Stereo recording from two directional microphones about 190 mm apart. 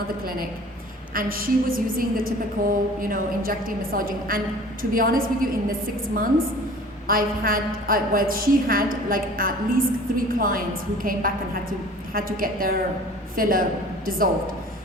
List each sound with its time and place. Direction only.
1.1 s a woman's voice: 50° right (ahead or behind)
7.1 s a woman's voice: 50° right (ahead or behind)